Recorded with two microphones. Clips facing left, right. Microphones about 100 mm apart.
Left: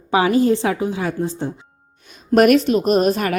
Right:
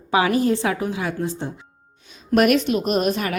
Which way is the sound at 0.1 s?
30° left (ahead or behind).